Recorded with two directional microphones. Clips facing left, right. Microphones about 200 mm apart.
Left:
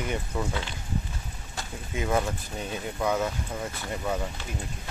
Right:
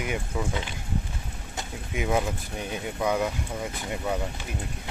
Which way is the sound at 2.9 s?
10° right (ahead or behind).